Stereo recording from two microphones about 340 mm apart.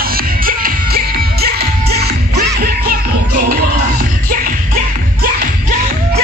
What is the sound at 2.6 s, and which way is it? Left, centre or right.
Music, right.